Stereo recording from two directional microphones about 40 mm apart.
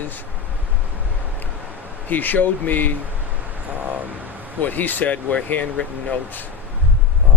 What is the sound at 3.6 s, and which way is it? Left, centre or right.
Vehicle, right.